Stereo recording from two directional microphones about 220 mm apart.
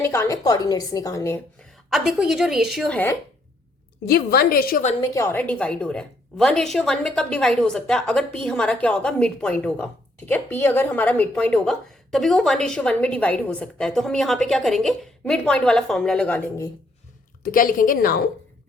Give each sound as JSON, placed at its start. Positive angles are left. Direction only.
{"t": 0.0, "sound": "a woman's voice", "side_deg": 10}
{"t": 1.9, "sound": "a woman's voice", "side_deg": 0}
{"t": 4.0, "sound": "a woman's voice", "side_deg": 45}
{"t": 4.9, "sound": "a woman's voice", "side_deg": 15}
{"t": 17.4, "sound": "a woman's voice", "side_deg": 40}